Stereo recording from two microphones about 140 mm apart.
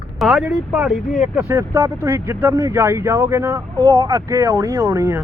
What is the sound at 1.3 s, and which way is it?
Speech, 15° right (ahead or behind).